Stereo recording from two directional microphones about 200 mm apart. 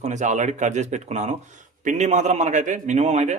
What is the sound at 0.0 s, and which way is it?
Speech, 35° right (ahead or behind).